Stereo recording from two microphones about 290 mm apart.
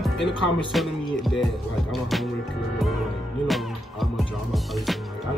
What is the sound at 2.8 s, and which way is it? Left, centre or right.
Music, centre.